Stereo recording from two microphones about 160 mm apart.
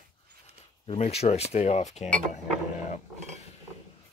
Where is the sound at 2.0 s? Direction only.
5° left (ahead or behind).